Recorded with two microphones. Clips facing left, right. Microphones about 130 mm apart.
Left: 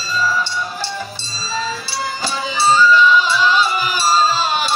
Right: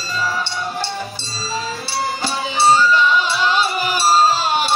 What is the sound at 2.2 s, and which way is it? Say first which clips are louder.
Music: right 1 dB; 60° right (ahead or behind).